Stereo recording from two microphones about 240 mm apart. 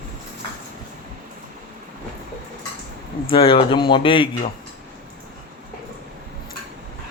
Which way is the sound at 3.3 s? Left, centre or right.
Left.